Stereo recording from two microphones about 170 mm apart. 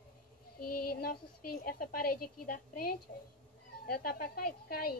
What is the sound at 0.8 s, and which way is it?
A woman's voice, 60° left (ahead or behind).